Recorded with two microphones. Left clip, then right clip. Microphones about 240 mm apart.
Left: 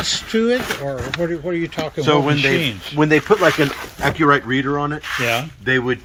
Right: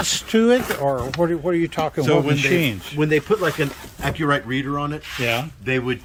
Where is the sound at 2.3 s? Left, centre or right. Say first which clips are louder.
Left 2 dB; centre.